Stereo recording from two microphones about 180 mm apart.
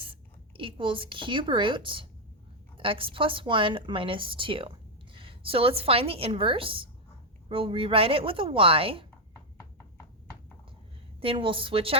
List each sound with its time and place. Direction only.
0.0 s a woman's voice: 30° right (ahead or behind)
11.2 s a woman's voice: 30° right (ahead or behind)